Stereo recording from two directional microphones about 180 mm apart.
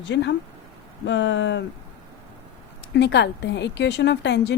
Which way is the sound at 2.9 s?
75° left (ahead or behind).